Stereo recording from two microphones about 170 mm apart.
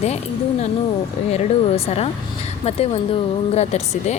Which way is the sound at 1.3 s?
40° left (ahead or behind).